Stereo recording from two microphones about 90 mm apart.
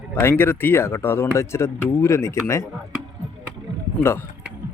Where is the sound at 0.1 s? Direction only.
25° left (ahead or behind).